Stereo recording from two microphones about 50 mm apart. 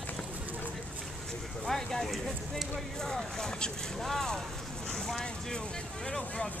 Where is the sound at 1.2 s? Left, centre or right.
Centre.